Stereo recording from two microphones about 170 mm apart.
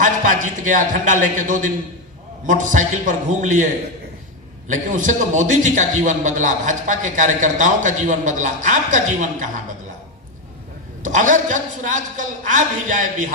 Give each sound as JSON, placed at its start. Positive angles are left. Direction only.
{"t": 0.0, "sound": "a man's voice", "side_deg": -50}
{"t": 4.7, "sound": "a man's voice", "side_deg": -50}
{"t": 11.0, "sound": "a man's voice", "side_deg": -50}